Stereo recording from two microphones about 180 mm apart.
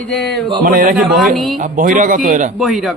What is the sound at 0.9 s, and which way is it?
Speech, centre (ahead or behind).